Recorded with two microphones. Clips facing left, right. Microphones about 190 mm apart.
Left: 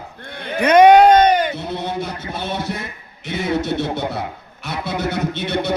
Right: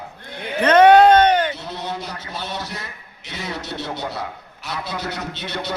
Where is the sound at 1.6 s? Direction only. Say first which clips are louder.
Left 5 dB; 55° left (ahead or behind).